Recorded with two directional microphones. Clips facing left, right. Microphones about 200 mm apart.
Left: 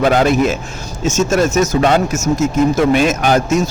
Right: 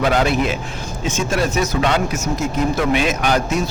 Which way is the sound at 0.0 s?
45° left (ahead or behind).